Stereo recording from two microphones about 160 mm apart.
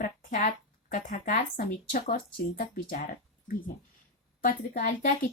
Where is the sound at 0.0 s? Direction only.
55° left (ahead or behind).